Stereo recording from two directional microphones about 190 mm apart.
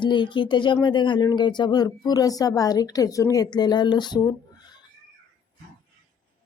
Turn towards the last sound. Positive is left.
turn(degrees=20)  # may be behind; listen again after turning